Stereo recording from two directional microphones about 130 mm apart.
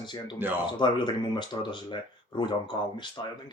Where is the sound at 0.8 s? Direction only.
35° left (ahead or behind).